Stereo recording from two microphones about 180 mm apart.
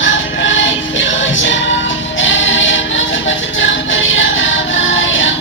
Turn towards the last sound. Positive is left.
turn(degrees=90)